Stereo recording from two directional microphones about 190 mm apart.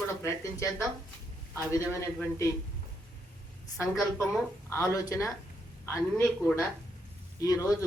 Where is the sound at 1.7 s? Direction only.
15° left (ahead or behind).